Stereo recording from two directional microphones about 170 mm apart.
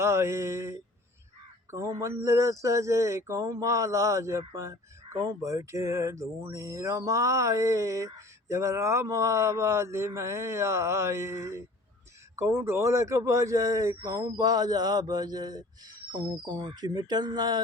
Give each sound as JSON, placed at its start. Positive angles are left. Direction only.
{"t": 0.0, "sound": "speech", "side_deg": -15}